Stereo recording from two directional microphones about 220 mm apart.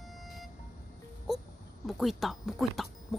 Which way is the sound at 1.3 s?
Centre (ahead or behind).